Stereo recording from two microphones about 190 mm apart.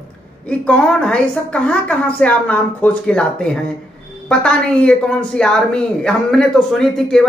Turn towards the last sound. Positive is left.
turn(degrees=5)  # may be behind; listen again after turning